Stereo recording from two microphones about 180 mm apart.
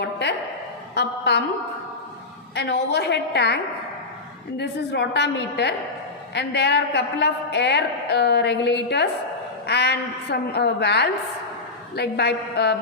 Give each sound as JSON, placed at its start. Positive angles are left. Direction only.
{"t": 0.0, "sound": "a sound", "side_deg": 70}
{"t": 0.9, "sound": "a woman's voice", "side_deg": 70}
{"t": 2.6, "sound": "a woman's voice", "side_deg": 70}